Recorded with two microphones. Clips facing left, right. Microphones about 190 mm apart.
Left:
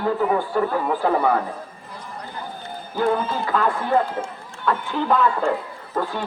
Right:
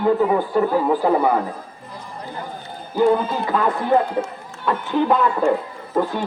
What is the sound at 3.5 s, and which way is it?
Speech, 20° right (ahead or behind).